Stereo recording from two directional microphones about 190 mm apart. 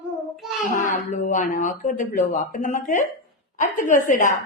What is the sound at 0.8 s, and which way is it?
A woman's voice, 40° left (ahead or behind).